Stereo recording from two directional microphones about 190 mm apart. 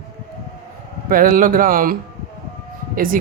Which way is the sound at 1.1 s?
45° right (ahead or behind).